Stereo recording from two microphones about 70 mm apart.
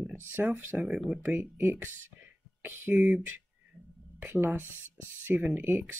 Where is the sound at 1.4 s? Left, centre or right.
Right.